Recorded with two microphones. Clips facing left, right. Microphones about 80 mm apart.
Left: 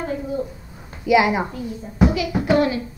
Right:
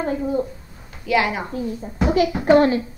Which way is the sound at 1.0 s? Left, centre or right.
Centre.